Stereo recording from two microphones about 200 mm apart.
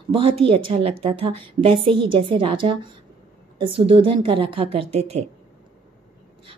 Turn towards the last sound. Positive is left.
turn(degrees=-25)  # may be behind; listen again after turning